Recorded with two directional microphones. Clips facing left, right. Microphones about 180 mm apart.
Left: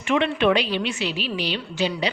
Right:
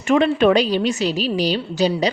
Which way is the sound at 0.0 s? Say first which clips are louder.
Right 5 dB; 40° right (ahead or behind).